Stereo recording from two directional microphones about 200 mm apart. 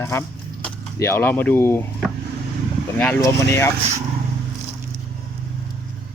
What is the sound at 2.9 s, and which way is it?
Speech, 10° left (ahead or behind).